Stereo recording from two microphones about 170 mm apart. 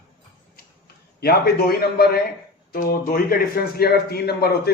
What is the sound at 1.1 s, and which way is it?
A man's voice, 65° left (ahead or behind).